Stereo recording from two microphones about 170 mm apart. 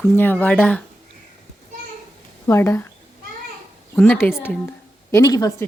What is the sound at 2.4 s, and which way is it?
Speech, 15° left (ahead or behind).